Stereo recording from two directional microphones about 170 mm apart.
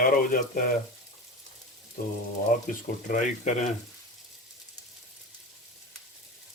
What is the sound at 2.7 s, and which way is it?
Speech, 55° left (ahead or behind).